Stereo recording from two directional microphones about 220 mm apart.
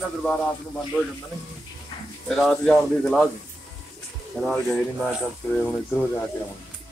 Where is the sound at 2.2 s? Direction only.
Centre (ahead or behind).